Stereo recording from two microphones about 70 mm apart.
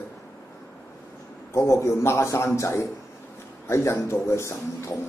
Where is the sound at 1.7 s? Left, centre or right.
Left.